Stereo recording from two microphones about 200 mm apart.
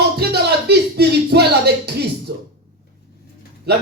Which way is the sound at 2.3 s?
55° right (ahead or behind).